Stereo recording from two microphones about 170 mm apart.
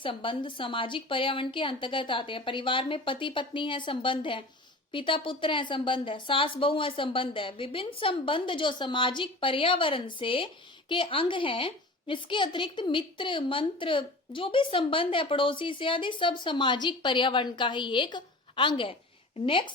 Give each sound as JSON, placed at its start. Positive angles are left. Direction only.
{"t": 0.0, "sound": "a woman's voice", "side_deg": 30}